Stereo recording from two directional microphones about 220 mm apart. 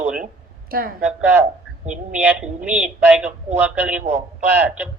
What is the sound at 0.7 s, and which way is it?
Speech, 40° right (ahead or behind).